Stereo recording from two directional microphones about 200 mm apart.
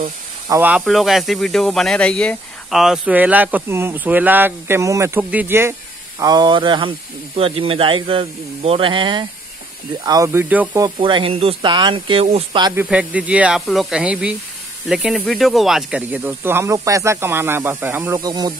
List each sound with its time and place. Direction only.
0.5 s speech: 10° right (ahead or behind)
11.0 s speech: 25° right (ahead or behind)
12.7 s speech: 5° right (ahead or behind)